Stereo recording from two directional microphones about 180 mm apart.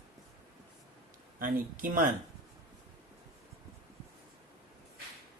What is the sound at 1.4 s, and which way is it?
Speech, 50° right (ahead or behind).